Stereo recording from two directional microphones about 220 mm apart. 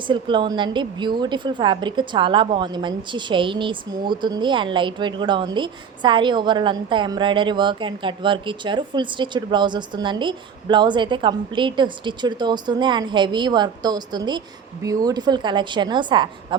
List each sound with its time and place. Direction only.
0.1 s a woman's voice: 20° right (ahead or behind)